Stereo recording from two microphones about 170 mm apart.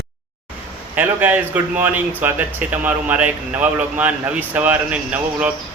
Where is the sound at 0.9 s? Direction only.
10° right (ahead or behind).